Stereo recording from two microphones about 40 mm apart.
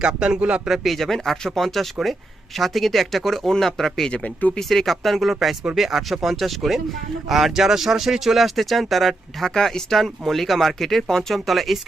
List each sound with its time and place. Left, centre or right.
0.0 s speech: right
0.7 s speech: centre
4.1 s speech: left
4.7 s speech: centre
11.3 s speech: centre